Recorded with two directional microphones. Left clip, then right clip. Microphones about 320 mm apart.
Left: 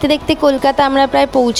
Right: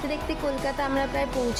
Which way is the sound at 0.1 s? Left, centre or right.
Left.